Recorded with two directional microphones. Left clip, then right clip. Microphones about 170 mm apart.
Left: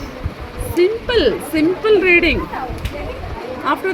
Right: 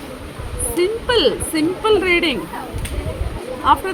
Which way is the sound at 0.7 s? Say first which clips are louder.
Left 2 dB; centre (ahead or behind).